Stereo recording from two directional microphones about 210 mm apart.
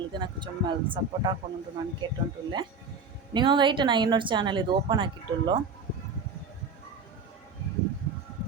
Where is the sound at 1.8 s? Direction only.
20° right (ahead or behind).